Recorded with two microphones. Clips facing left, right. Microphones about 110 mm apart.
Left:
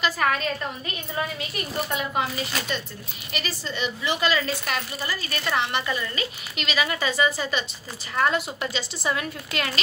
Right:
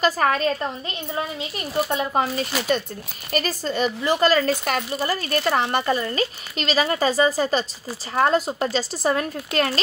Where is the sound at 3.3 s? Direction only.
45° right (ahead or behind).